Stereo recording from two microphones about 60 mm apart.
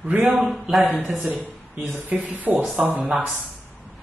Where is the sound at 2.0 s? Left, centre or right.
Right.